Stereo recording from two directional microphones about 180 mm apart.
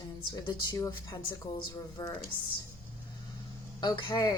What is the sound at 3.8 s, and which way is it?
Speech, 25° left (ahead or behind).